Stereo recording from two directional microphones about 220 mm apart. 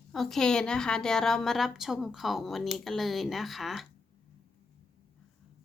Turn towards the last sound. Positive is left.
turn(degrees=0)  # may be behind; listen again after turning